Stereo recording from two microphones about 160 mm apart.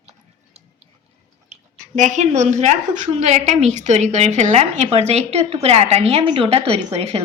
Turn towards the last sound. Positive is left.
turn(degrees=-40)  # may be behind; listen again after turning